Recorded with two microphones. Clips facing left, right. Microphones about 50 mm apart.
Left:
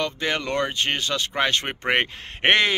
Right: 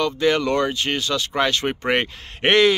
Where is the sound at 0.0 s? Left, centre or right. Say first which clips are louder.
Right 6 dB; left.